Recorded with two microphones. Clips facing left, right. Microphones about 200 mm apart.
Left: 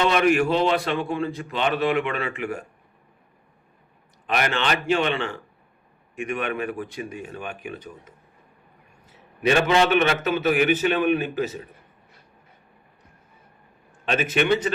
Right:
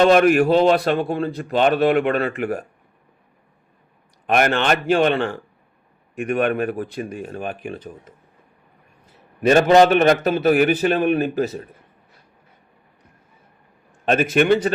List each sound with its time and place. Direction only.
0.0 s a man's voice: 45° right (ahead or behind)
4.3 s speech: 55° right (ahead or behind)
6.4 s speech: 50° right (ahead or behind)
9.4 s a man's voice: 45° right (ahead or behind)
14.0 s speech: 50° right (ahead or behind)